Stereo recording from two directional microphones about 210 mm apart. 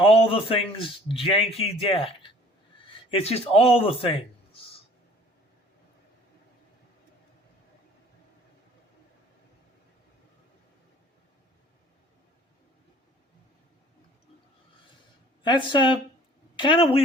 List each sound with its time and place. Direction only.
0.0 s a man's voice: 25° left (ahead or behind)
15.4 s a man's voice: 20° left (ahead or behind)